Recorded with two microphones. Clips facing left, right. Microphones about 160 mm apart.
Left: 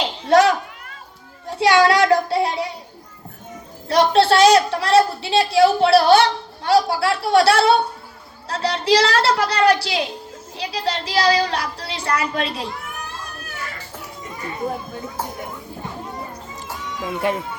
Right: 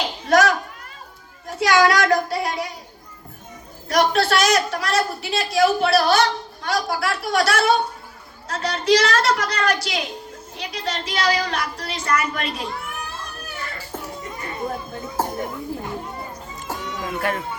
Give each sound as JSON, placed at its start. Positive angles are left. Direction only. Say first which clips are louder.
{"t": 0.0, "sound": "a sound", "louder": "left 3 dB", "side_deg": 30}
{"t": 1.5, "sound": "child singing", "louder": "left 2 dB", "side_deg": 30}
{"t": 3.8, "sound": "a woman's voice", "louder": "left 4 dB", "side_deg": 30}
{"t": 17.2, "sound": "a woman's voice", "louder": "left 3 dB", "side_deg": 20}